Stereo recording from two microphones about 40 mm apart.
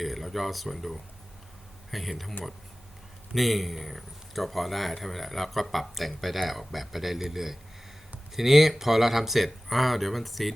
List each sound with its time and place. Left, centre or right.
0.0 s speech: centre
3.3 s speech: centre